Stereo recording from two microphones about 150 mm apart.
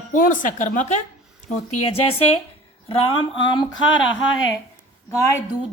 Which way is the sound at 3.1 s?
35° left (ahead or behind).